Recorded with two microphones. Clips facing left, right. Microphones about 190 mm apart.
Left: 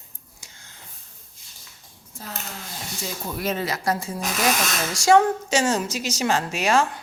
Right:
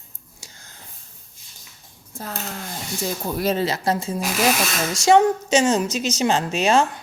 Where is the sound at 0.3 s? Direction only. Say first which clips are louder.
Right 4 dB; 35° right (ahead or behind).